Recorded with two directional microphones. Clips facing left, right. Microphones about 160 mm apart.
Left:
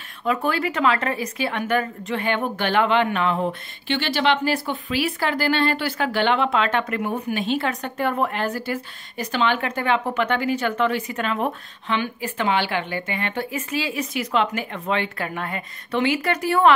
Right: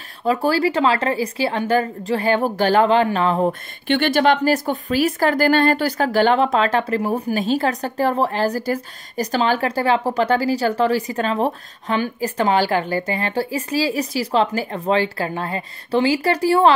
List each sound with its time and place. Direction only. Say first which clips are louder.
0.2 s speech: right 5 dB; 35° right (ahead or behind)
3.8 s speech: right 5 dB; 55° right (ahead or behind); by 16.7 s 30° right (ahead or behind)